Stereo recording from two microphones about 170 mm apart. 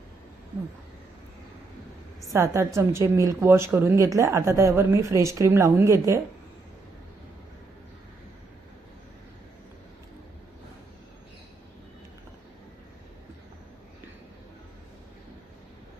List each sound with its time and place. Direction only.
2.3 s a woman's voice: 15° right (ahead or behind)